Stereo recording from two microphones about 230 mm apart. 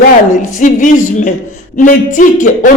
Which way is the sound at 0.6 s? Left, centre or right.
Left.